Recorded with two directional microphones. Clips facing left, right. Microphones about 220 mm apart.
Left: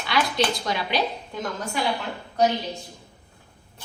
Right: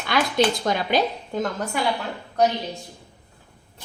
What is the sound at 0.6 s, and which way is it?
Speech, 45° right (ahead or behind).